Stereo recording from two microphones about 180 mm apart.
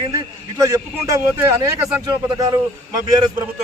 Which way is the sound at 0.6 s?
15° right (ahead or behind).